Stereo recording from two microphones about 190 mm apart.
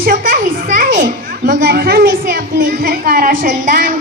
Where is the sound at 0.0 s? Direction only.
45° right (ahead or behind).